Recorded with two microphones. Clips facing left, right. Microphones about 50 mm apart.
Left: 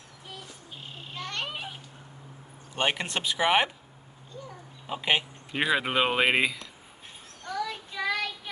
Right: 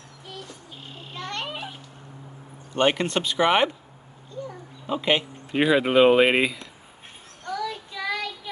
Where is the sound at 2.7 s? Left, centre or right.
Centre.